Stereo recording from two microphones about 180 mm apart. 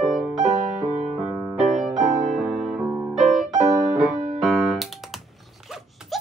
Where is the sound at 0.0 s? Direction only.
Centre (ahead or behind).